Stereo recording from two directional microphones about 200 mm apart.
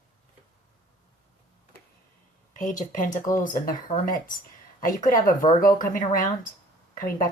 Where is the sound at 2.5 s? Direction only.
40° left (ahead or behind).